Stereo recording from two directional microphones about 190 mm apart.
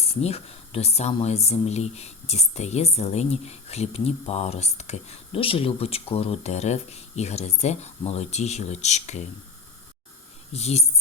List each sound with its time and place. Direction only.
0.0 s speech: 35° left (ahead or behind)
10.5 s speech: 35° left (ahead or behind)